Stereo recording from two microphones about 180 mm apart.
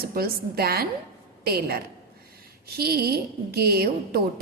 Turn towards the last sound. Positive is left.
turn(degrees=-60)  # may be behind; listen again after turning